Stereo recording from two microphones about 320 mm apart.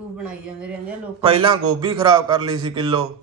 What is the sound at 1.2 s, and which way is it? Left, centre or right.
A man's voice, centre.